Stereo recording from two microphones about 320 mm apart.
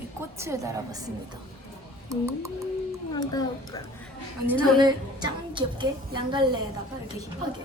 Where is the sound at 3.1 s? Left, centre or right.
Centre.